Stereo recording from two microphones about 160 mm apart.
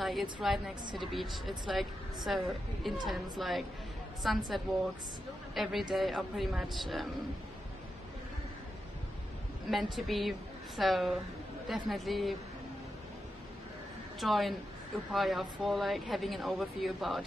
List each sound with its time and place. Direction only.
0.0 s speech: centre (ahead or behind)
9.7 s speech: centre (ahead or behind)
14.2 s speech: centre (ahead or behind)